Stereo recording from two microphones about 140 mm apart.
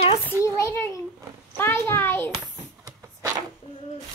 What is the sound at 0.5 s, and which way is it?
A child's voice, 20° left (ahead or behind).